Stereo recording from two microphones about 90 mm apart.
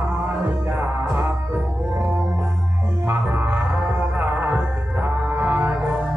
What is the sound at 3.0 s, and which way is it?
Music, 20° right (ahead or behind).